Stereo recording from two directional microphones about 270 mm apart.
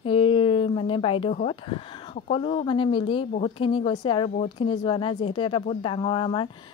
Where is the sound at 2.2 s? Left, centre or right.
Left.